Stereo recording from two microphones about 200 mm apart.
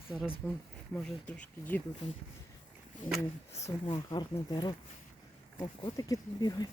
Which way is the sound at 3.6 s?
25° left (ahead or behind).